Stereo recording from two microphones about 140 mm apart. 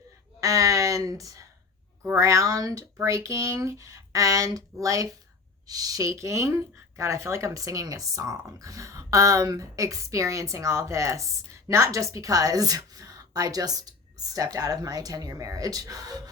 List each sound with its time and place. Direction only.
0.3 s speech: 25° right (ahead or behind)